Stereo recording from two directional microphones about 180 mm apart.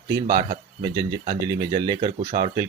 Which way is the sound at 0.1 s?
25° right (ahead or behind).